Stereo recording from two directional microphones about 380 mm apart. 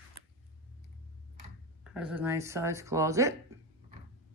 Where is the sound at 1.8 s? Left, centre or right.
Centre.